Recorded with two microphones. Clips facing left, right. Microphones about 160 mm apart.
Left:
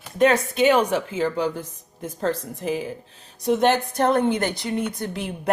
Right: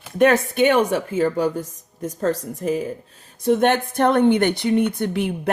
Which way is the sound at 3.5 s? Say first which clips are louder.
Right 2 dB; 55° right (ahead or behind).